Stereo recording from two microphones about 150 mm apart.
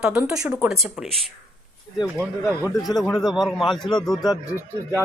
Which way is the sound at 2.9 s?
Centre (ahead or behind).